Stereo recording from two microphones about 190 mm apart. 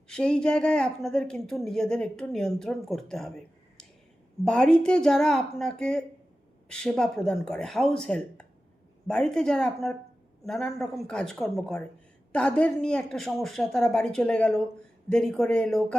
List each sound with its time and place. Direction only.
0.1 s a woman's voice: 5° left (ahead or behind)
4.4 s a woman's voice: 5° left (ahead or behind)